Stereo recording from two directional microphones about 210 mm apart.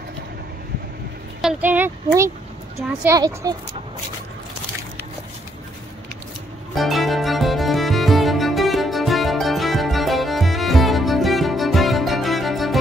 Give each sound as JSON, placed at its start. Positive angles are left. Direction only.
{"t": 1.4, "sound": "speech", "side_deg": -5}
{"t": 6.7, "sound": "music", "side_deg": 0}